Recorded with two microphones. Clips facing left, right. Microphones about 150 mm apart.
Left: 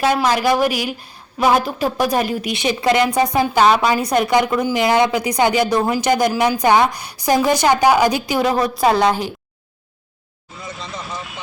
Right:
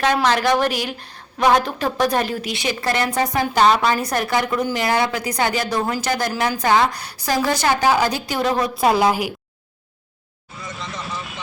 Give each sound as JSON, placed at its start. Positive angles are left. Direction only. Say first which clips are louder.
{"t": 0.0, "sound": "a woman's voice", "louder": "left 2 dB", "side_deg": 10}